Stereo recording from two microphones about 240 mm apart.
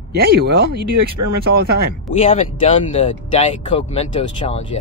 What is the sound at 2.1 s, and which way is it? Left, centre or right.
Speech, left.